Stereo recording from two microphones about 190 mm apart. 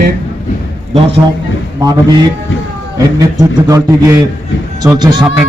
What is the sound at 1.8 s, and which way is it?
Speech, 20° right (ahead or behind).